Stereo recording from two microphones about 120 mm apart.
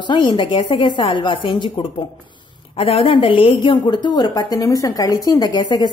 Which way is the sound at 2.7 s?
50° left (ahead or behind).